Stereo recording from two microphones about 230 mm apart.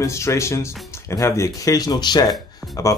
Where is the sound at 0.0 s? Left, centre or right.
Centre.